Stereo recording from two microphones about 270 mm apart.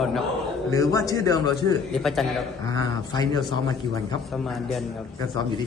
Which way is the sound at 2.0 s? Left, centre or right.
Centre.